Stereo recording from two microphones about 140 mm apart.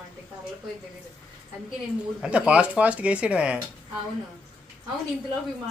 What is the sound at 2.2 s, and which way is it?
Speech, 5° right (ahead or behind).